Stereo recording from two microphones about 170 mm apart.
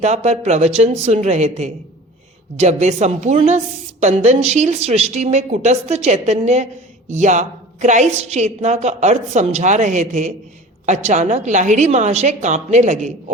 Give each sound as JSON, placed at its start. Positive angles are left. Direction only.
{"t": 0.0, "sound": "a woman's voice", "side_deg": -40}